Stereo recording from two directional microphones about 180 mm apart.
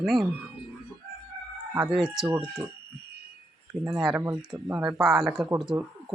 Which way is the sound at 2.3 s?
25° right (ahead or behind).